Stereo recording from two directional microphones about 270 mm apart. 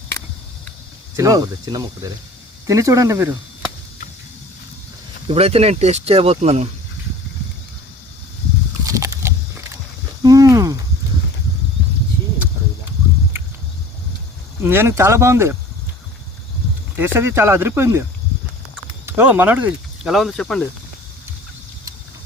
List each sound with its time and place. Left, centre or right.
1.1 s speech: centre
5.3 s speech: right
8.9 s a sound: centre
13.3 s a sound: centre
14.6 s speech: centre
17.0 s speech: centre
19.0 s speech: centre